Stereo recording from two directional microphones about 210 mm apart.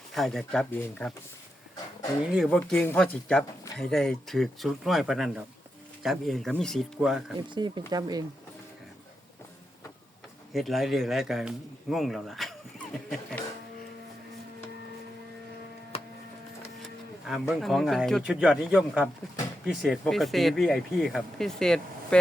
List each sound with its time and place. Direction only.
0.1 s speech: centre (ahead or behind)
2.3 s speech: centre (ahead or behind)
7.5 s speech: 20° right (ahead or behind)
10.5 s speech: centre (ahead or behind)
15.9 s printer: 30° left (ahead or behind)
17.5 s speech: centre (ahead or behind)